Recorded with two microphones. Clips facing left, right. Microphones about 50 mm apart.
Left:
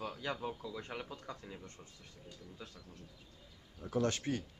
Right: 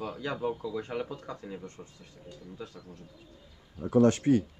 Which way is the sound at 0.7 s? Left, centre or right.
Centre.